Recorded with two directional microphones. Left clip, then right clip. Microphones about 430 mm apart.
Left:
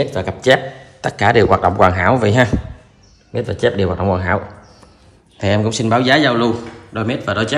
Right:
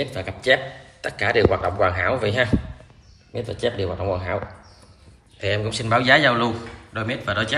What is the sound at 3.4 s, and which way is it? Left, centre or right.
Speech, left.